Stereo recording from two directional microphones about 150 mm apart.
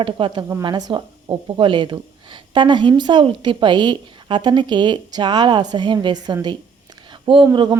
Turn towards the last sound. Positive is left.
turn(degrees=-30)  # may be behind; listen again after turning